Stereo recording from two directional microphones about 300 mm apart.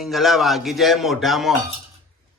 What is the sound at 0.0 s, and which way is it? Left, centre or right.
A man's voice, centre.